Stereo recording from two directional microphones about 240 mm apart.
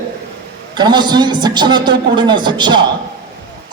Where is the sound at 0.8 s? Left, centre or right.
Centre.